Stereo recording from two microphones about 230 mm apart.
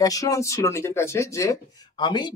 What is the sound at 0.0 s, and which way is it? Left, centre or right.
Speech, centre.